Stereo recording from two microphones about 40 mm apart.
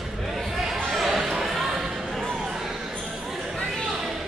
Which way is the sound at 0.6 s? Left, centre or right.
Centre.